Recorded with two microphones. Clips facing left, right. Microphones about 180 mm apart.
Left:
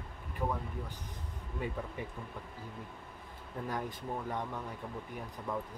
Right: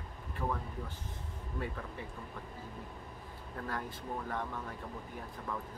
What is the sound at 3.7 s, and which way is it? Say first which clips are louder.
Speech: left 2 dB; 15° left (ahead or behind).